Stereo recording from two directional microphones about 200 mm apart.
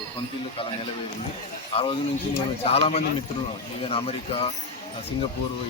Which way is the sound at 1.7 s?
25° left (ahead or behind).